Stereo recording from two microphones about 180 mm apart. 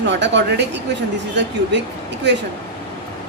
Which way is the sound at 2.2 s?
70° right (ahead or behind).